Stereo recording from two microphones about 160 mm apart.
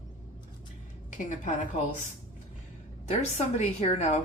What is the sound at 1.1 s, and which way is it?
Speech, 50° left (ahead or behind).